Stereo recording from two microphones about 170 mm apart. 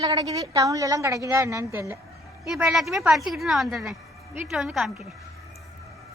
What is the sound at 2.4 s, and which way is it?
A woman's voice, 5° right (ahead or behind).